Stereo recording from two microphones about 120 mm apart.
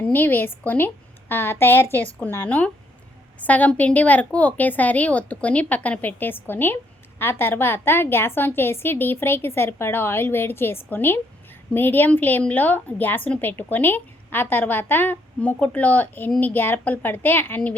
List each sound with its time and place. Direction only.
0.0 s a woman's voice: 15° left (ahead or behind)